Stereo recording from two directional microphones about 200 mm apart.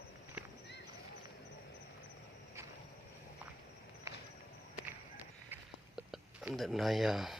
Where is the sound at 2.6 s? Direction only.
15° right (ahead or behind).